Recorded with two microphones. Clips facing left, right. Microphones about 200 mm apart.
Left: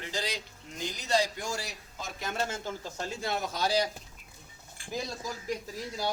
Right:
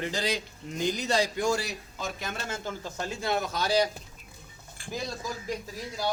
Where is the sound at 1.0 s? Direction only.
85° right.